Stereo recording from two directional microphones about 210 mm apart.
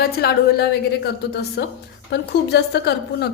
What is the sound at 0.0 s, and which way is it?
A woman's voice, 45° left (ahead or behind).